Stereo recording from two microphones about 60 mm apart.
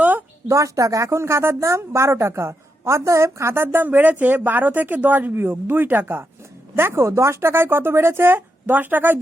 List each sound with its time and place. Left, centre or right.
0.0 s a sound: right
0.4 s a woman's voice: right
3.5 s speech: right